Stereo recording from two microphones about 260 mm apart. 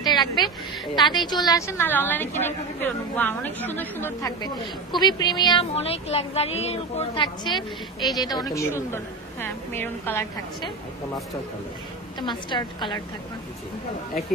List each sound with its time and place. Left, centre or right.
0.0 s a sound: centre
0.9 s a woman's voice: centre
12.2 s a woman's voice: centre